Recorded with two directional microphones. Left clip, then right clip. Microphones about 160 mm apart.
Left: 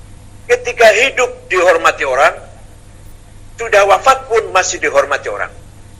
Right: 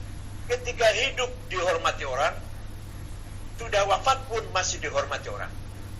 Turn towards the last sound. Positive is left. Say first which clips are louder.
# left 15 dB
turn(degrees=50)  # may be behind; listen again after turning